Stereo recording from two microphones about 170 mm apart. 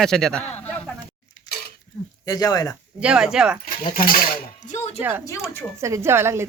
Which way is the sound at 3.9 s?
55° left (ahead or behind).